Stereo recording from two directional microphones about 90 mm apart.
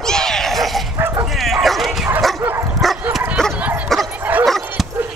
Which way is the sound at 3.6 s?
15° right (ahead or behind).